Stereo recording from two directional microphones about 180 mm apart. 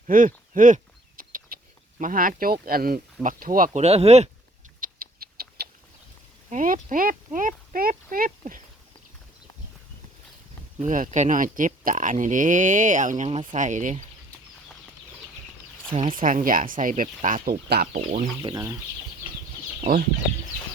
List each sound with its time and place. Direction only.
0.1 s a sound: 50° right (ahead or behind)
2.0 s speech: 50° right (ahead or behind)
3.8 s speech: 35° right (ahead or behind)
4.8 s a sound: 55° right (ahead or behind)
6.5 s speech: 45° right (ahead or behind)
10.8 s speech: 45° right (ahead or behind)
15.9 s speech: 30° right (ahead or behind)
16.1 s speech: 50° right (ahead or behind)
18.4 s speech: 20° right (ahead or behind)
19.8 s speech: 45° right (ahead or behind)